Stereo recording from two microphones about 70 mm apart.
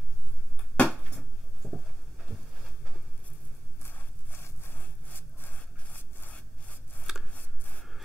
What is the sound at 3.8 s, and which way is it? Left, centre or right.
Sawing, left.